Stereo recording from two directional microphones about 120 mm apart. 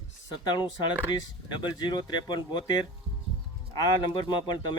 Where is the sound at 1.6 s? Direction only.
35° left (ahead or behind).